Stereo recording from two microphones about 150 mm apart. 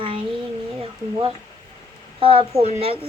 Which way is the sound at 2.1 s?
35° right (ahead or behind).